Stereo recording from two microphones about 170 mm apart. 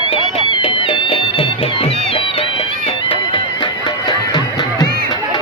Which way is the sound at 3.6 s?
25° left (ahead or behind).